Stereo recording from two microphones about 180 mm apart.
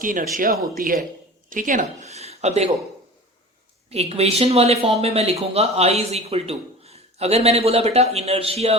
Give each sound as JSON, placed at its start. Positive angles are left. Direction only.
{"t": 0.0, "sound": "speech", "side_deg": -50}
{"t": 3.8, "sound": "speech", "side_deg": -35}